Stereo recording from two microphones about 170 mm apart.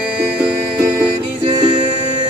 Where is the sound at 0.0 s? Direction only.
5° right (ahead or behind).